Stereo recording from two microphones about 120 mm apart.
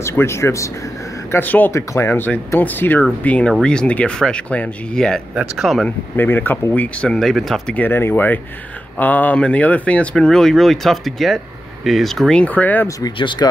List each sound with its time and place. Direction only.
0.0 s speech: 20° left (ahead or behind); by 5.9 s centre (ahead or behind)
5.9 s speech: 15° left (ahead or behind)
7.7 s speech: 15° left (ahead or behind)
13.2 s speech: 40° left (ahead or behind)